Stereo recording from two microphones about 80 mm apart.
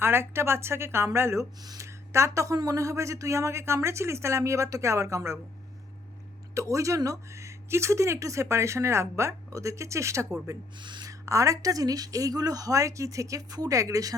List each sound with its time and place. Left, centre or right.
0.0 s speech: right
1.6 s speech: right
1.9 s speech: right
6.5 s speech: right
10.8 s speech: right
11.0 s speech: right